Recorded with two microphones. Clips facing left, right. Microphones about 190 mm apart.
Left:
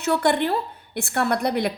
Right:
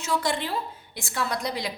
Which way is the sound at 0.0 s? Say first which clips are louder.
Left 7 dB; 60° left (ahead or behind).